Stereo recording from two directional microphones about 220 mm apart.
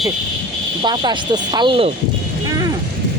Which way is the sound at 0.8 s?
20° right (ahead or behind).